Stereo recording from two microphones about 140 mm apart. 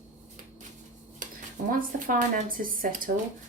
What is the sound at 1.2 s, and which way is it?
Dishes, 70° right (ahead or behind).